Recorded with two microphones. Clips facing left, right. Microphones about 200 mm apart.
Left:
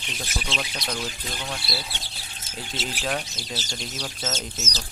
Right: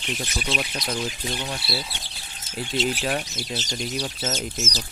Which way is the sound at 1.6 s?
Centre (ahead or behind).